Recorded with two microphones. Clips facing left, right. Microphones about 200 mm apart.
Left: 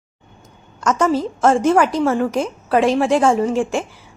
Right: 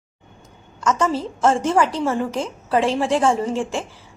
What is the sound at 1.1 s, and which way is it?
A woman's voice, 15° left (ahead or behind).